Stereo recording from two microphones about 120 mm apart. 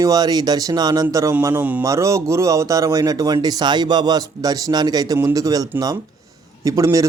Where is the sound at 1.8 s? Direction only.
25° right (ahead or behind).